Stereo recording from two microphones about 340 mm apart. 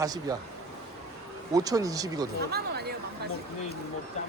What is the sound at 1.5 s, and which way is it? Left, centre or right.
Speech, centre.